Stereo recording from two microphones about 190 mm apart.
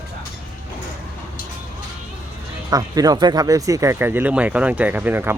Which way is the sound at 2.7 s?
20° right (ahead or behind).